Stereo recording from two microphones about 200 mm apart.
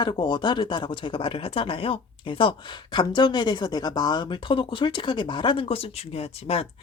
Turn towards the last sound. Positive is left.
turn(degrees=30)  # may be behind; listen again after turning